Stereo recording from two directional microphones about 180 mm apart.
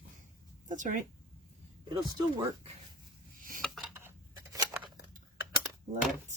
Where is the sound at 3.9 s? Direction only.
15° right (ahead or behind).